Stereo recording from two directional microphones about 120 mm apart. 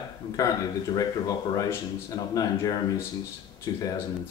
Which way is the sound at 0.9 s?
30° left (ahead or behind).